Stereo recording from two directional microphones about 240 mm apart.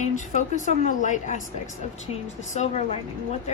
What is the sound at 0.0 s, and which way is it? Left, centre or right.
A woman's voice, left.